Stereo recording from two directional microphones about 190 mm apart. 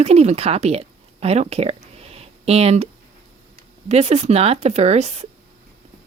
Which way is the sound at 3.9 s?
35° right (ahead or behind).